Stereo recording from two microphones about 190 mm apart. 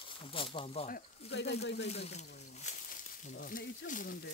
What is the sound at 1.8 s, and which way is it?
Speech, 35° left (ahead or behind).